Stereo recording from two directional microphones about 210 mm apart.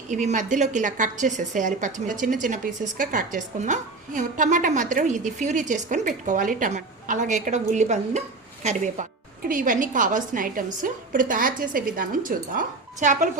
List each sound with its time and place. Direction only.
0.1 s a woman's voice: 35° right (ahead or behind)